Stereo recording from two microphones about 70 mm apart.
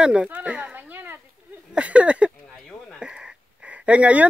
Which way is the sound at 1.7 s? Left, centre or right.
Centre.